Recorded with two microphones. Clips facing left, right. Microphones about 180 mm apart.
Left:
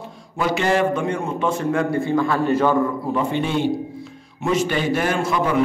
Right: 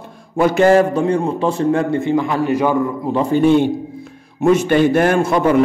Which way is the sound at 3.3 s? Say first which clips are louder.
Right 8 dB; 50° right (ahead or behind).